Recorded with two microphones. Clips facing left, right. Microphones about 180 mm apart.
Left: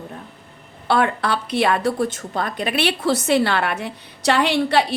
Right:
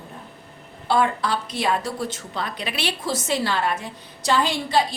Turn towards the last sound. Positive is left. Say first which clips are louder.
# left 3 dB
turn(degrees=65)  # may be behind; listen again after turning